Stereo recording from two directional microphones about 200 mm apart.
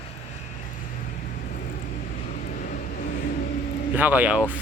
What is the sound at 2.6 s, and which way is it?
Vehicle, 45° left (ahead or behind).